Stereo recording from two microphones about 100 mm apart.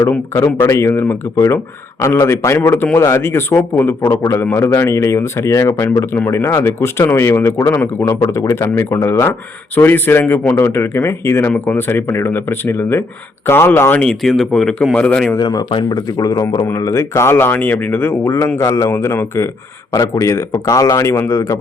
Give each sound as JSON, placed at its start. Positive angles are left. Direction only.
{"t": 0.6, "sound": "speech", "side_deg": 25}
{"t": 14.0, "sound": "a man's voice", "side_deg": 5}
{"t": 15.4, "sound": "speech", "side_deg": 45}
{"t": 16.6, "sound": "speech", "side_deg": 30}